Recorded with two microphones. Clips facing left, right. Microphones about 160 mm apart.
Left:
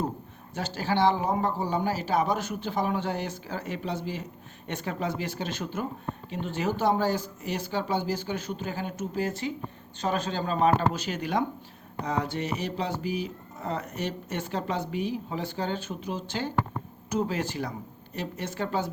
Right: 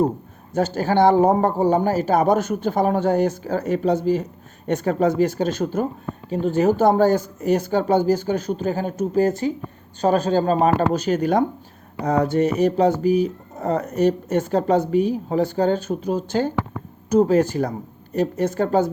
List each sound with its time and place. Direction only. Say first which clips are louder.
0.5 s speech: right 9 dB; 45° right (ahead or behind)